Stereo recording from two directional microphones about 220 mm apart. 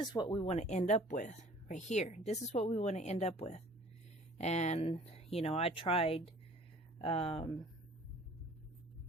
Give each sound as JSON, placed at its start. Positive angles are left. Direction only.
{"t": 0.0, "sound": "speech", "side_deg": 20}